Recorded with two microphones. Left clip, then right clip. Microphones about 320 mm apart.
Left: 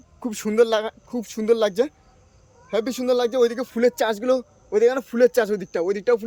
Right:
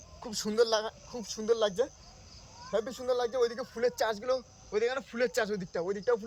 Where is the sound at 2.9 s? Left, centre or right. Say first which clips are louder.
Left 13 dB; left.